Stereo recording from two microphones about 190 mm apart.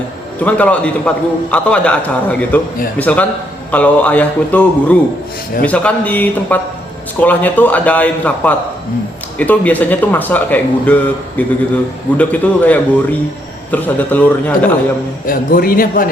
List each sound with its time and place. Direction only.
0.3 s a man's voice: 5° left (ahead or behind)
15.3 s a man's voice: 50° left (ahead or behind)